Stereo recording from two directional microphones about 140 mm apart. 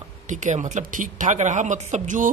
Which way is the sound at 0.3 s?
60° right (ahead or behind).